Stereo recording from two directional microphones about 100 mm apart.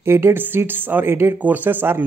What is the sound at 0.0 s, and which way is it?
Speech, 25° right (ahead or behind).